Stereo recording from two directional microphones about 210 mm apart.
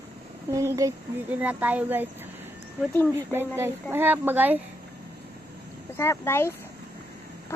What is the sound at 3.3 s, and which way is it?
Speech, 10° right (ahead or behind).